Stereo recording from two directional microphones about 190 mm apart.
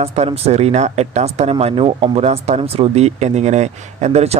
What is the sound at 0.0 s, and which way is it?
Speech, 35° right (ahead or behind).